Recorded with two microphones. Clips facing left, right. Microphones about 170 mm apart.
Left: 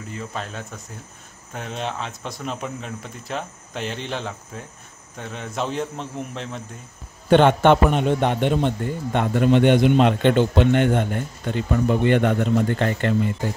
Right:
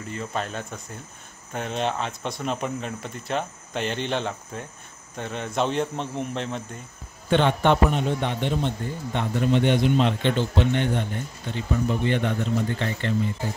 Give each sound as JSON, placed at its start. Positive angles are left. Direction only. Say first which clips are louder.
{"t": 0.1, "sound": "speech", "louder": "right 2 dB", "side_deg": 0}
{"t": 7.2, "sound": "a man's voice", "louder": "left 6 dB", "side_deg": 55}